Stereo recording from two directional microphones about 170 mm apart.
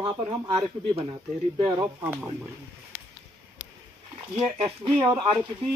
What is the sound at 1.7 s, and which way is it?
Speech, 15° right (ahead or behind).